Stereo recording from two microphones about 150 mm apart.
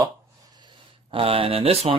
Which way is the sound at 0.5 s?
35° right (ahead or behind).